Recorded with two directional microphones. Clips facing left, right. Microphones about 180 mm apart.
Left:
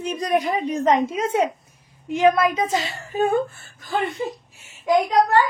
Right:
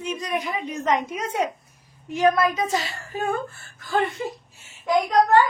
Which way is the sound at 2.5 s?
20° left (ahead or behind).